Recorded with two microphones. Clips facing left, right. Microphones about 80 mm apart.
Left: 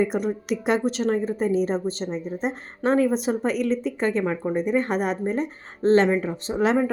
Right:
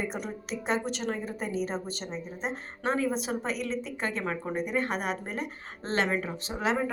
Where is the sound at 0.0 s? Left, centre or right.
Left.